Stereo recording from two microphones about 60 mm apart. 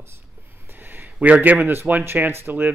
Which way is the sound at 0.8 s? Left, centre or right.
Right.